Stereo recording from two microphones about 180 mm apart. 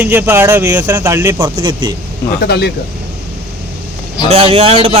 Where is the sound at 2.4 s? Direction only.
60° left (ahead or behind).